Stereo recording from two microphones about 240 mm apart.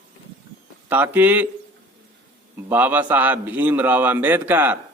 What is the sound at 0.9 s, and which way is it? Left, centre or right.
Speech, centre.